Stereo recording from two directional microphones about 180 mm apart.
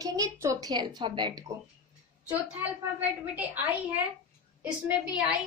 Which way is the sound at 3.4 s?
10° right (ahead or behind).